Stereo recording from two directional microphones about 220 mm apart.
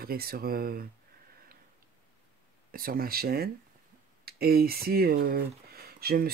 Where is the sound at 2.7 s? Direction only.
40° right (ahead or behind).